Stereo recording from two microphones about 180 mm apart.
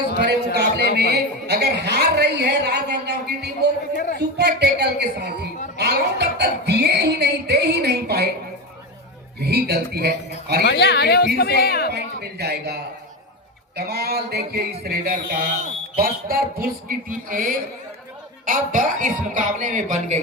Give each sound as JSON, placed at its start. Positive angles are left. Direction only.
{"t": 0.2, "sound": "a man's voice", "side_deg": -65}
{"t": 5.7, "sound": "a sound", "side_deg": -65}
{"t": 9.4, "sound": "a woman's voice", "side_deg": -65}
{"t": 10.6, "sound": "speech", "side_deg": 70}
{"t": 11.9, "sound": "a woman's voice", "side_deg": -60}